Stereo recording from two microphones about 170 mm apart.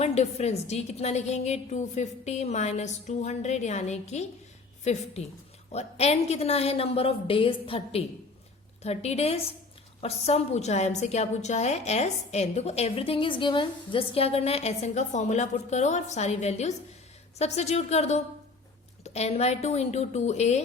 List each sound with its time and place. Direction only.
0.0 s a woman's voice: 40° left (ahead or behind)